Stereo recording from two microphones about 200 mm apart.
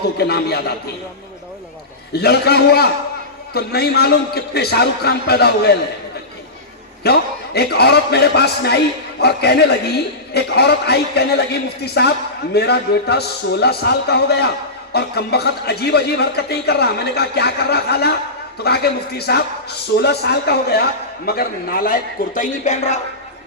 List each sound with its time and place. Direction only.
0.2 s a man's voice: 55° left (ahead or behind)
2.1 s a man's voice: 55° left (ahead or behind)
7.0 s a man's voice: 55° left (ahead or behind)
22.4 s music: 40° left (ahead or behind)